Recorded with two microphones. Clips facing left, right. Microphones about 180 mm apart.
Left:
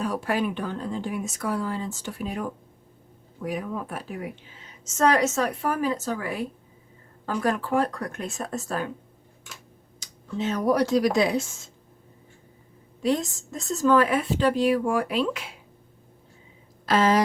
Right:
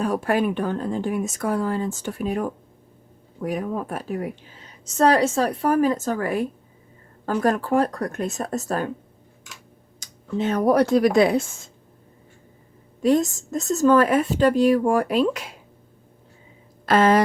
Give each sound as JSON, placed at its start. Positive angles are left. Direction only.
{"t": 0.0, "sound": "a woman's voice", "side_deg": -50}
{"t": 10.0, "sound": "speech", "side_deg": -55}
{"t": 13.0, "sound": "a woman's voice", "side_deg": -45}
{"t": 16.8, "sound": "speech", "side_deg": -55}